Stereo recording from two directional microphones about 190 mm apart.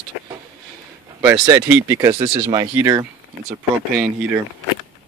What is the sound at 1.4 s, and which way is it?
Speech, 10° right (ahead or behind).